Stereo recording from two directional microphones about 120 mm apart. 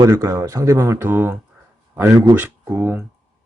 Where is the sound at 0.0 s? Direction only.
25° right (ahead or behind).